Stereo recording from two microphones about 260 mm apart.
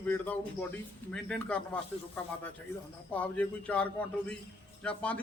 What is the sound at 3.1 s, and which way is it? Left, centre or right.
A man's voice, centre.